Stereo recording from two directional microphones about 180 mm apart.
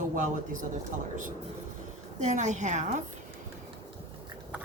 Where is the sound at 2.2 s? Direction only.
40° right (ahead or behind).